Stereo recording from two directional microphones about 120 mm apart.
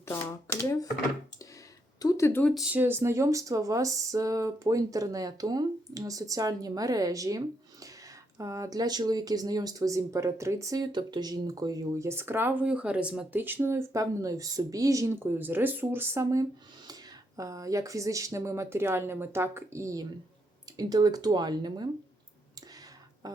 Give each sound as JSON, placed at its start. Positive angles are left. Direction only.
{"t": 0.0, "sound": "shuffling cards", "side_deg": 20}
{"t": 2.0, "sound": "a sound", "side_deg": 30}
{"t": 2.6, "sound": "speech", "side_deg": -10}
{"t": 23.2, "sound": "speech", "side_deg": -30}